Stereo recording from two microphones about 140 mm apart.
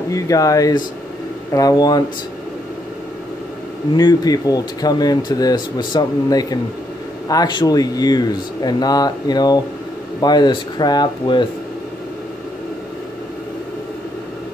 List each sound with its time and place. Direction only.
0.1 s speech: 25° left (ahead or behind)
3.9 s speech: 30° left (ahead or behind)